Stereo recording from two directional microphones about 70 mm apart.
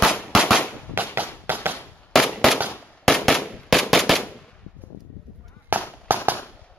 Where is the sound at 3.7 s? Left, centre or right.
Centre.